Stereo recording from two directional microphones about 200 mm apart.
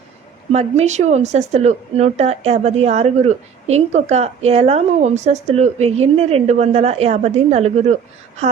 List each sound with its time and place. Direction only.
0.5 s a woman's voice: 35° right (ahead or behind)